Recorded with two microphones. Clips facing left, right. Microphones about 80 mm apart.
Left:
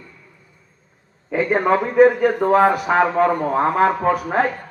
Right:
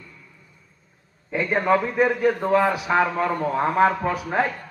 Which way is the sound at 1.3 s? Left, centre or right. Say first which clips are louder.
Left 3 dB; left.